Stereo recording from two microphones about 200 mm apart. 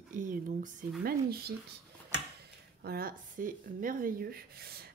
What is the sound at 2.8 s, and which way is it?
A woman's voice, 50° right (ahead or behind).